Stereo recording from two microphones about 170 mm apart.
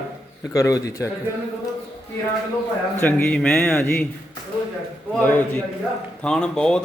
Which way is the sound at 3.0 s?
5° left (ahead or behind).